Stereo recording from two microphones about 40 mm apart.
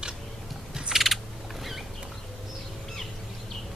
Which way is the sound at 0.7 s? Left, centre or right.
Centre.